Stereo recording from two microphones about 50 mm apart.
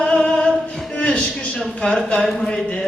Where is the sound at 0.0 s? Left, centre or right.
Centre.